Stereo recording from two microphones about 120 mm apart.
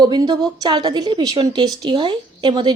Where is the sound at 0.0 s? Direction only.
35° right (ahead or behind).